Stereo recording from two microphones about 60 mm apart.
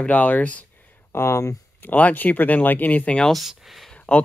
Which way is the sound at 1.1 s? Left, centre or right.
Left.